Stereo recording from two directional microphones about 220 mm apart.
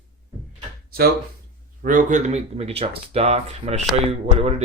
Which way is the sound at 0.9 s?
45° right (ahead or behind).